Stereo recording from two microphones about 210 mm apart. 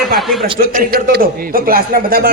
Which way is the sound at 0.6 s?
45° right (ahead or behind).